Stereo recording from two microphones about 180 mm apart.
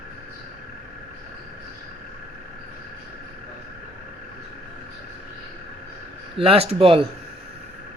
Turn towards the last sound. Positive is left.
turn(degrees=-30)  # may be behind; listen again after turning